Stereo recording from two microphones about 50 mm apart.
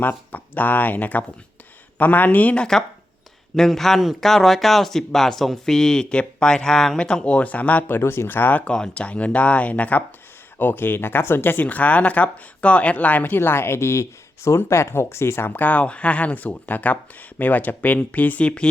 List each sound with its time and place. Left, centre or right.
0.3 s speech: left
3.5 s speech: centre; by 7.9 s left
7.9 s speech: left
10.6 s speech: left
13.4 s speech: left
15.6 s speech: left
18.4 s speech: left